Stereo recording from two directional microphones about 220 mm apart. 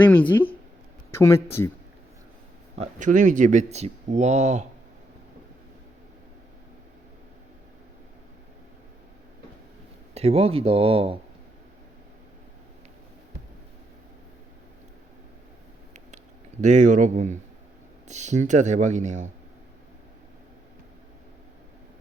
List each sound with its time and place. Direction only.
0.0 s speech: 10° left (ahead or behind)
2.7 s speech: 30° right (ahead or behind)
10.2 s speech: 25° right (ahead or behind)
16.1 s speech: 35° right (ahead or behind)